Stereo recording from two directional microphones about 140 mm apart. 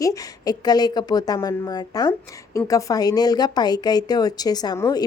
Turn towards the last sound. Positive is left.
turn(degrees=25)  # may be behind; listen again after turning